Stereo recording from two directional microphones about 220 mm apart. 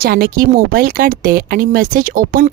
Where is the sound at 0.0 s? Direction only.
40° right (ahead or behind).